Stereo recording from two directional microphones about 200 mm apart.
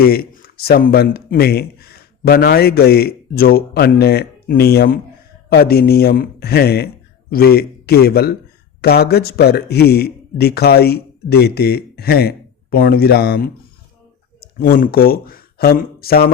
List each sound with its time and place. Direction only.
0.0 s speech: 50° left (ahead or behind)